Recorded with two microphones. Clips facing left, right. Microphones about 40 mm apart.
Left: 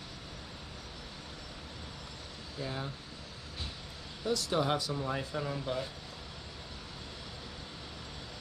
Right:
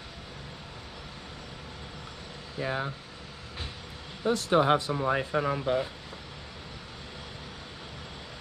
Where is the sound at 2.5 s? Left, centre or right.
Right.